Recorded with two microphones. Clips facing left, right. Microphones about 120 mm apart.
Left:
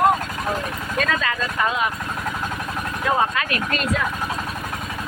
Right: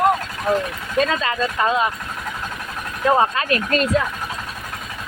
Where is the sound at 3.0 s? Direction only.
35° right (ahead or behind).